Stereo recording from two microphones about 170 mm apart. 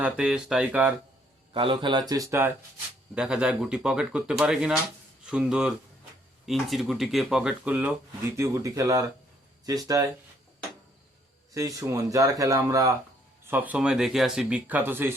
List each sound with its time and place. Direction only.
0.0 s speech: 5° right (ahead or behind)
1.5 s speech: 30° right (ahead or behind)
3.2 s speech: 5° right (ahead or behind); by 10.1 s 20° right (ahead or behind)
11.5 s speech: 20° right (ahead or behind)